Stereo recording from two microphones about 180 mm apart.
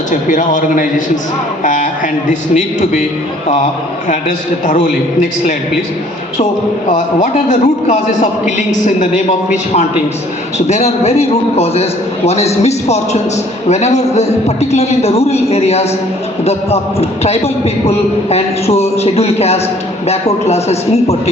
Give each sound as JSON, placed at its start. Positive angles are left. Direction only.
{"t": 0.1, "sound": "a man's voice", "side_deg": 45}
{"t": 4.6, "sound": "a man's voice", "side_deg": 45}
{"t": 6.9, "sound": "a man's voice", "side_deg": 40}